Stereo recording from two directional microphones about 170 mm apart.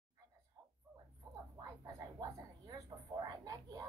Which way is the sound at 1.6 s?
20° right (ahead or behind).